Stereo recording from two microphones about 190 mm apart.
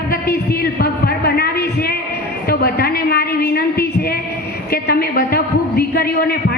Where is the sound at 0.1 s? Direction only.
55° left (ahead or behind).